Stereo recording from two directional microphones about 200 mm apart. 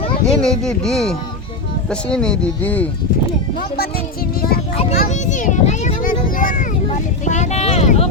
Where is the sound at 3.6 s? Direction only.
50° left (ahead or behind).